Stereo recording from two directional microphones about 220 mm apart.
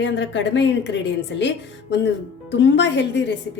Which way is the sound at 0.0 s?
55° left (ahead or behind).